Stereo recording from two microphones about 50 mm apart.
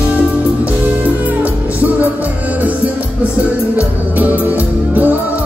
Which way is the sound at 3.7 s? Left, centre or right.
Right.